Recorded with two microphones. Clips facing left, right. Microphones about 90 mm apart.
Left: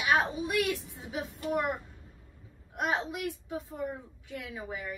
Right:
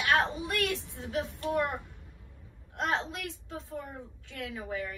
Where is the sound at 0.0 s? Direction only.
15° left (ahead or behind).